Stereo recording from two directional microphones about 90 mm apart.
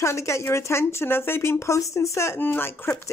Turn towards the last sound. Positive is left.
turn(degrees=25)  # may be behind; listen again after turning